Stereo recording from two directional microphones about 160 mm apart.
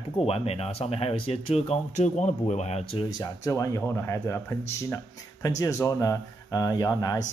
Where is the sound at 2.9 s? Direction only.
30° left (ahead or behind).